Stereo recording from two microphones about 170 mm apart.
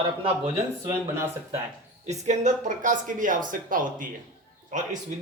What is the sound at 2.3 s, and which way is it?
Speech, 45° right (ahead or behind).